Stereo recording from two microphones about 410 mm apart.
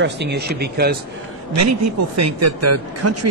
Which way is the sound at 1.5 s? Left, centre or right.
Right.